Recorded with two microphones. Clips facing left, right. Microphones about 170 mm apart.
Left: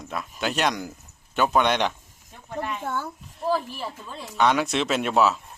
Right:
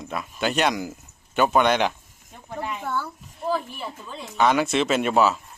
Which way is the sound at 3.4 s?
Centre (ahead or behind).